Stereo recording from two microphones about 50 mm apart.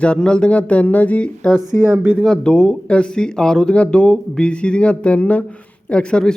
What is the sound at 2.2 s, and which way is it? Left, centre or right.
Speech, centre.